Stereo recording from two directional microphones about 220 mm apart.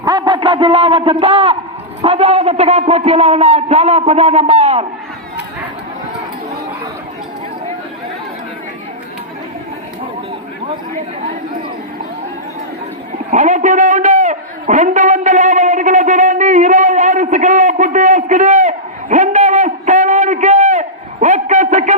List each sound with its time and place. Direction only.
0.0 s a sound: 20° right (ahead or behind)
2.0 s a man's voice: 30° right (ahead or behind)
13.3 s a man's voice: 35° right (ahead or behind)